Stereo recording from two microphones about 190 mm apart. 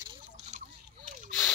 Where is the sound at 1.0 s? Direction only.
45° right (ahead or behind).